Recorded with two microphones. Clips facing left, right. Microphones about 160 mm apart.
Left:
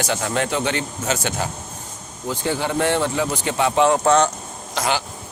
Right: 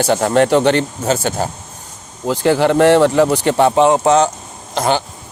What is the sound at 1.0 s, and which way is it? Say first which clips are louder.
Speech: right 6 dB; 35° right (ahead or behind).